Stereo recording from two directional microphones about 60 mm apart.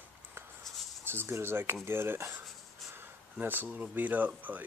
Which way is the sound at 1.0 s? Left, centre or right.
Right.